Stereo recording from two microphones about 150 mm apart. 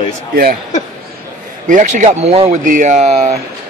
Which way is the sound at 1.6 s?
55° right (ahead or behind).